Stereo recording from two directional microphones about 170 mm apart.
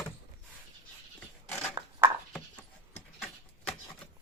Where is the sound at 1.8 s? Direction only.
20° right (ahead or behind).